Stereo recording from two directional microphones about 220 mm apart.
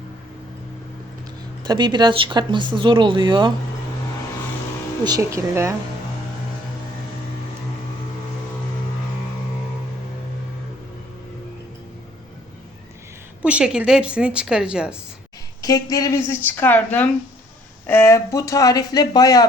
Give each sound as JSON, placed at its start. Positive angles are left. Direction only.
{"t": 1.6, "sound": "speech", "side_deg": -20}
{"t": 5.0, "sound": "speech", "side_deg": -15}
{"t": 13.4, "sound": "a woman's voice", "side_deg": -5}
{"t": 15.6, "sound": "speech", "side_deg": 15}